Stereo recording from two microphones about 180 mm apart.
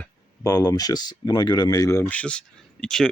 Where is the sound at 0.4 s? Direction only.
20° left (ahead or behind).